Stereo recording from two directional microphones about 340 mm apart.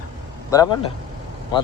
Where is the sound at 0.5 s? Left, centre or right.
Centre.